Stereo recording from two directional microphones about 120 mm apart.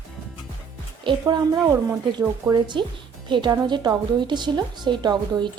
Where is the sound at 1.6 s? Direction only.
20° right (ahead or behind).